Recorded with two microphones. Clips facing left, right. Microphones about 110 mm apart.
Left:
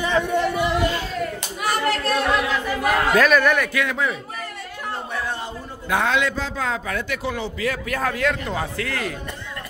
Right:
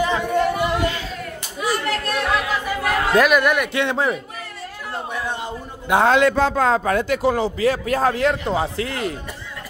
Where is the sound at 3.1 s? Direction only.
15° right (ahead or behind).